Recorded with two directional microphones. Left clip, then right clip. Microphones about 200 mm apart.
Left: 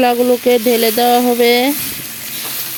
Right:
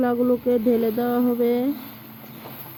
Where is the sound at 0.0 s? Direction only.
40° left (ahead or behind).